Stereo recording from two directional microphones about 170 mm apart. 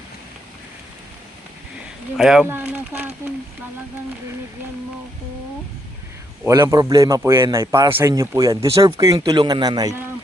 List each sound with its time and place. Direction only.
2.1 s speech: 5° right (ahead or behind)
6.4 s speech: 15° right (ahead or behind)